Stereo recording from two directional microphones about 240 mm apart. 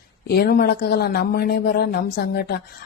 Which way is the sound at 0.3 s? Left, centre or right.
Left.